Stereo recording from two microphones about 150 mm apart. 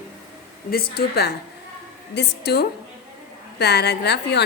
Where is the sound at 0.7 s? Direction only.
90° left.